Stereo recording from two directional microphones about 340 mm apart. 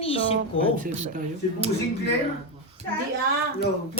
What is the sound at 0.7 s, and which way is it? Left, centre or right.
Speech, right.